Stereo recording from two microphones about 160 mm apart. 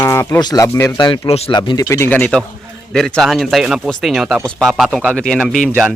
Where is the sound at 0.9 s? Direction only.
30° left (ahead or behind).